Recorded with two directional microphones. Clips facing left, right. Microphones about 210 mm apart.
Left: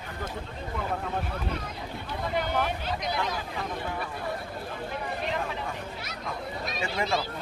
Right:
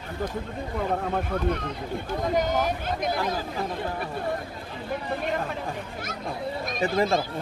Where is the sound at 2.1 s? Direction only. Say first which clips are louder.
Right 5 dB; 45° right (ahead or behind).